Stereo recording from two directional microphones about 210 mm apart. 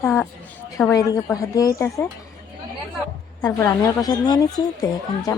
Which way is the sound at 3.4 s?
10° left (ahead or behind).